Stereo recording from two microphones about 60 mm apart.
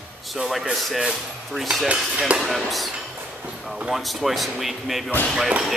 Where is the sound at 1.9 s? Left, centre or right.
Right.